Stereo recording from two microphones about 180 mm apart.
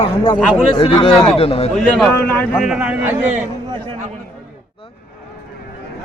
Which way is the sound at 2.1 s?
15° left (ahead or behind).